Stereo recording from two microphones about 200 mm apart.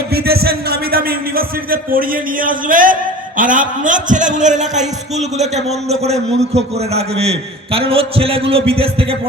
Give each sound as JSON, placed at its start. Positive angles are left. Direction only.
{"t": 0.1, "sound": "speech", "side_deg": -50}